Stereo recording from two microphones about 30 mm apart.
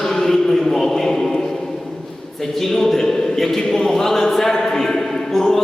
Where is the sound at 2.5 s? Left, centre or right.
Centre.